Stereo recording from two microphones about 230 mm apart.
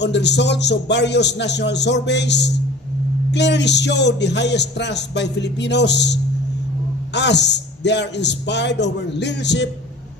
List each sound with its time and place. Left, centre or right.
0.0 s speech: left
7.2 s speech: left